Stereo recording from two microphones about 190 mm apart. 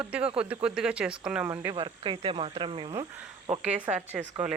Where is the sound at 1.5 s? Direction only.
25° right (ahead or behind).